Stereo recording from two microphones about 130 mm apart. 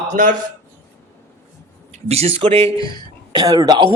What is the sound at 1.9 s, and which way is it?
Speech, 55° right (ahead or behind).